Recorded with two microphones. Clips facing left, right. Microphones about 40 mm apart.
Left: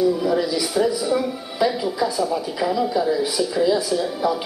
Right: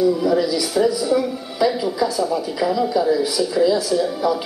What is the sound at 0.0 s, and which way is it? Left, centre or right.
Speech, centre.